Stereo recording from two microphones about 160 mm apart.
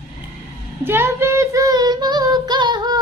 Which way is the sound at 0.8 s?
15° right (ahead or behind).